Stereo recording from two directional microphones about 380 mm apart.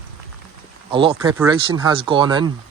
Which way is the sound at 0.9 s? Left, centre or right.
Centre.